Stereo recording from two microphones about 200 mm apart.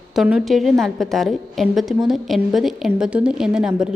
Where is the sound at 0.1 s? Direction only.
5° right (ahead or behind).